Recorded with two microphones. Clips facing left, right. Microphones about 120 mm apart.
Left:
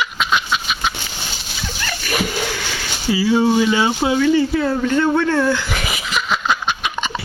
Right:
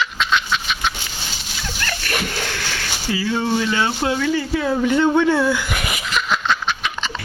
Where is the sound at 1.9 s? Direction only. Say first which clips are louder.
Left 4 dB; 5° left (ahead or behind).